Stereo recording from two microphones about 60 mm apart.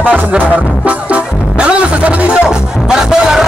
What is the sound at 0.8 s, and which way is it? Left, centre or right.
Music, right.